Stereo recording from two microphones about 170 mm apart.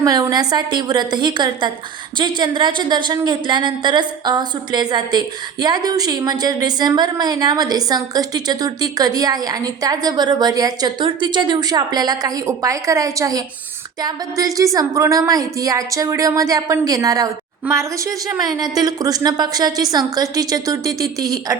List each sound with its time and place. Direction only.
0.0 s a woman's voice: 20° right (ahead or behind)